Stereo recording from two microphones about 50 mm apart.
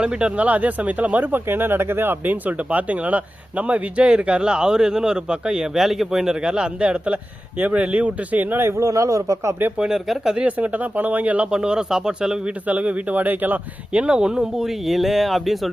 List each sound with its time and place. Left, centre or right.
0.0 s a man's voice: right
8.6 s speech: right
9.7 s a man's voice: centre
10.6 s speech: right
11.5 s a man's voice: centre
12.6 s speech: right
13.9 s speech: right; by 15.7 s centre